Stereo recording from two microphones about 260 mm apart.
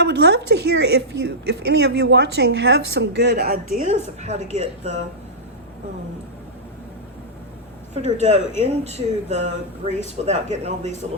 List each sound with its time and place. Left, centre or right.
0.0 s a woman's voice: right
7.9 s speech: right